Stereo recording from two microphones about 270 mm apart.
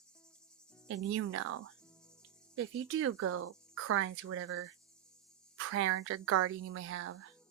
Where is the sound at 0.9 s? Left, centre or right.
Right.